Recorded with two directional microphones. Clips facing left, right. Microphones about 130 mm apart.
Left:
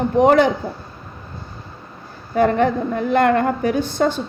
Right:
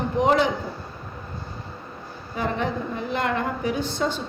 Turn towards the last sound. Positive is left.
turn(degrees=55)  # may be behind; listen again after turning